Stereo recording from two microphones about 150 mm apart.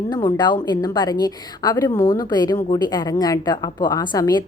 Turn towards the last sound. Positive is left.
turn(degrees=25)  # may be behind; listen again after turning